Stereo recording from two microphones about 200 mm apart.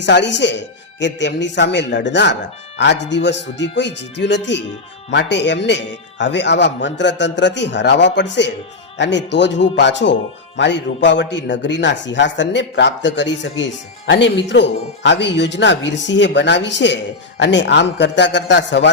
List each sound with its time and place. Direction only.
0.0 s speech: 60° left (ahead or behind)